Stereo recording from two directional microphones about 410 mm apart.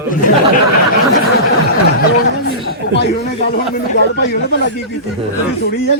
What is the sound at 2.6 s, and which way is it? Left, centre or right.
Speech, left.